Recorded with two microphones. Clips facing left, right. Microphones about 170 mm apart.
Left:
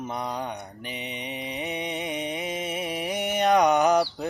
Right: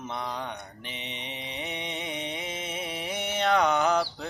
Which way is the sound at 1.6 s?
10° left (ahead or behind).